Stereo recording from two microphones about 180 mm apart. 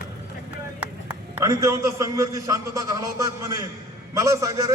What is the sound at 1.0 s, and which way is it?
A man's voice, 15° right (ahead or behind).